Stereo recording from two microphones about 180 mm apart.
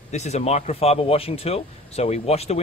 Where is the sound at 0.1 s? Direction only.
40° left (ahead or behind).